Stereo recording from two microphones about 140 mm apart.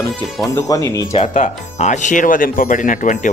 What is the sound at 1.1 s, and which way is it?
Speech, 50° left (ahead or behind).